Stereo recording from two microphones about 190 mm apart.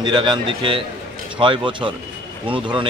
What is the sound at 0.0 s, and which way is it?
A man's voice, 25° right (ahead or behind).